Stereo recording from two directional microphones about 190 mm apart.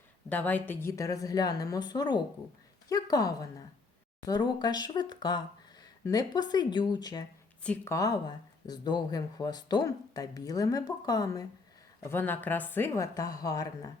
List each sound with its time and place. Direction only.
0.3 s a woman's voice: 10° left (ahead or behind)
7.6 s a woman's voice: 5° left (ahead or behind)
7.9 s a woman's voice: 20° left (ahead or behind)